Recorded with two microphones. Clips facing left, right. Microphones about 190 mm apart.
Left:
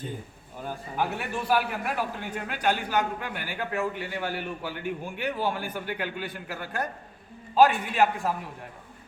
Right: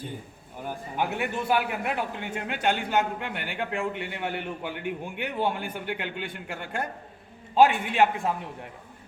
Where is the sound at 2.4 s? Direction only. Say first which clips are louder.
Even; 20° right (ahead or behind).